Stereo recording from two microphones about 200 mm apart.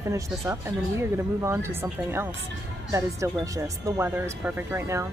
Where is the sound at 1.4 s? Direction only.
15° right (ahead or behind).